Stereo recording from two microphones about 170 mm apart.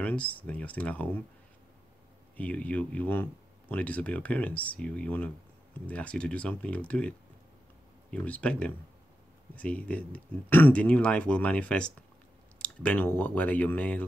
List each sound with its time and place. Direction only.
0.0 s speech: 10° left (ahead or behind)
2.3 s speech: 10° left (ahead or behind)